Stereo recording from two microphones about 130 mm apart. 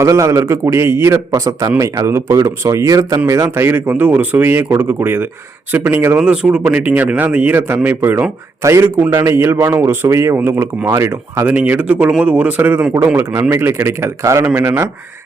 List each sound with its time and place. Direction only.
0.0 s a man's voice: 25° right (ahead or behind)